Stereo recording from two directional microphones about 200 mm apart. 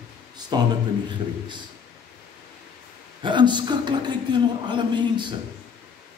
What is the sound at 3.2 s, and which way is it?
A man's voice, 20° right (ahead or behind).